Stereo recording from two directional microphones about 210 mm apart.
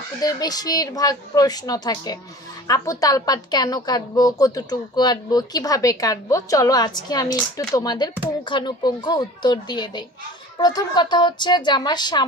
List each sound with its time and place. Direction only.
0.2 s a woman's voice: 20° left (ahead or behind)